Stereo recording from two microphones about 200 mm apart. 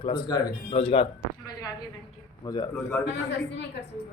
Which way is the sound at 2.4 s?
20° left (ahead or behind).